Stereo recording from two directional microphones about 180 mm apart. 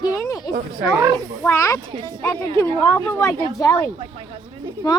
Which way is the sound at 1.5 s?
15° left (ahead or behind).